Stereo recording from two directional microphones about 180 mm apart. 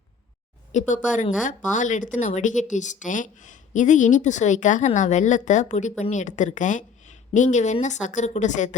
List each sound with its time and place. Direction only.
0.7 s a woman's voice: 40° left (ahead or behind)